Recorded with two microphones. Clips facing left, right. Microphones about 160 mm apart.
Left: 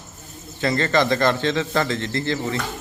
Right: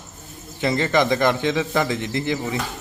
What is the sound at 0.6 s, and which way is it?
A man's voice, 15° right (ahead or behind).